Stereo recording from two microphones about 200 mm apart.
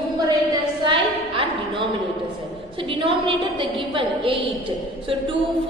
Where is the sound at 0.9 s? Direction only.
25° right (ahead or behind).